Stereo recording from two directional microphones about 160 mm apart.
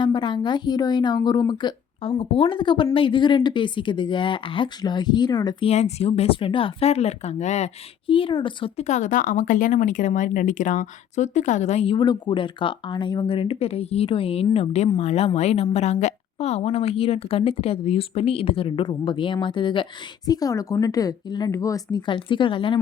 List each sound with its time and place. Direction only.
0.0 s speech: 30° left (ahead or behind)
5.6 s speech: 40° left (ahead or behind)
8.8 s speech: 50° left (ahead or behind); by 22.8 s 30° left (ahead or behind)